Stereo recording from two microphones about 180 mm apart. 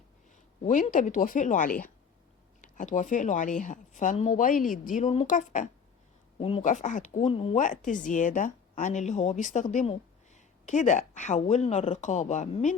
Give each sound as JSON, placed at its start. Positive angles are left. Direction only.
{"t": 0.6, "sound": "speech", "side_deg": 45}
{"t": 7.6, "sound": "speech", "side_deg": 45}